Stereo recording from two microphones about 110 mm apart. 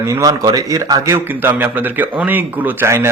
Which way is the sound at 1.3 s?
20° right (ahead or behind).